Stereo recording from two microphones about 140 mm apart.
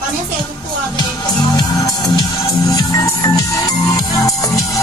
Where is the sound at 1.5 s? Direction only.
30° left (ahead or behind).